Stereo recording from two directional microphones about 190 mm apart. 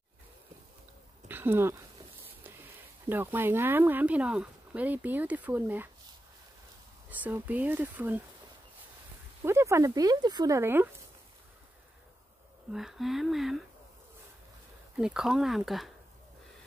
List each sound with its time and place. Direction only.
1.3 s a sound: 10° right (ahead or behind)
3.1 s speech: 10° right (ahead or behind)
7.1 s speech: 10° right (ahead or behind)
9.4 s speech: 15° right (ahead or behind)
12.7 s speech: centre (ahead or behind)
15.0 s speech: 5° right (ahead or behind)